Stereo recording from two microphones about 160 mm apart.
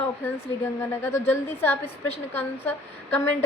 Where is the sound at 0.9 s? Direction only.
15° left (ahead or behind).